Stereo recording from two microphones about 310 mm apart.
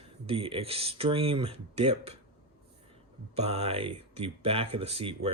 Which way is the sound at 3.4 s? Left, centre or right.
Centre.